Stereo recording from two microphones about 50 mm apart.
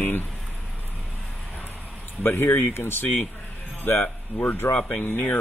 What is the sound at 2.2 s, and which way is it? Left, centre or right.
Speech, left.